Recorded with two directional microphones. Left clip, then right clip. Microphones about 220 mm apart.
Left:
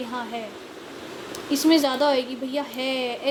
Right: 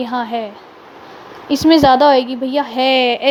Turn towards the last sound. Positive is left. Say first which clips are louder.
# right 13 dB
turn(degrees=-40)  # may be behind; listen again after turning